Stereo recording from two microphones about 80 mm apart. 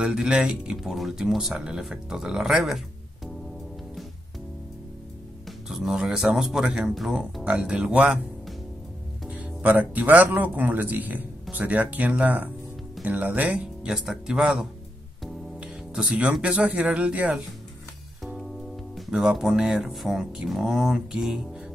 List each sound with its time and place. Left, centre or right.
0.0 s speech: centre
5.7 s speech: centre
7.4 s speech: centre
9.3 s speech: centre
18.2 s speech: centre